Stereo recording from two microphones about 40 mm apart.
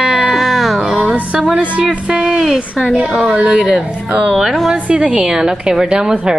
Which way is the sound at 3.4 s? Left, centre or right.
Centre.